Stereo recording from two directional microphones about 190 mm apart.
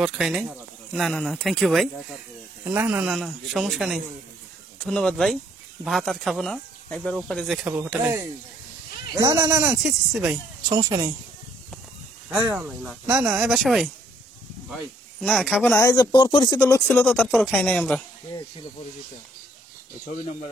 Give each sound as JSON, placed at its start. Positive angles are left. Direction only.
{"t": 0.0, "sound": "speech", "side_deg": 0}
{"t": 2.6, "sound": "speech", "side_deg": -10}
{"t": 8.0, "sound": "speech", "side_deg": -15}
{"t": 9.5, "sound": "speech", "side_deg": -5}
{"t": 10.7, "sound": "speech", "side_deg": -20}
{"t": 12.3, "sound": "speech", "side_deg": -10}
{"t": 15.1, "sound": "speech", "side_deg": 0}
{"t": 16.5, "sound": "speech", "side_deg": 10}